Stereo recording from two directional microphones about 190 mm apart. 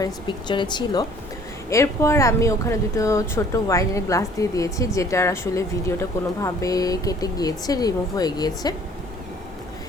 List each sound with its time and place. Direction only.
0.0 s speech: 25° left (ahead or behind)